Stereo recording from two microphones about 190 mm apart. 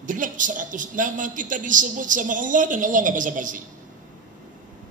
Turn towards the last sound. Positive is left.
turn(degrees=-45)  # may be behind; listen again after turning